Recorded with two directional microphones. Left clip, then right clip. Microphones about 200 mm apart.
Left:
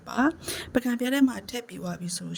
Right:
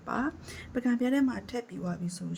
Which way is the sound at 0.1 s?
40° left (ahead or behind).